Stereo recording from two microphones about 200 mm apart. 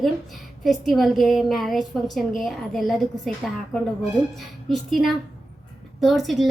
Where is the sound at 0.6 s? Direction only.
Centre (ahead or behind).